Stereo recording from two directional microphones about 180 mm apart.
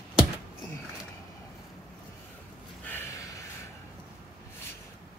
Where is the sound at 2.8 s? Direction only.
15° left (ahead or behind).